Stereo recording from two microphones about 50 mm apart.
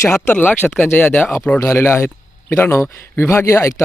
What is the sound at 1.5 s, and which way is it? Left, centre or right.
Speech, left.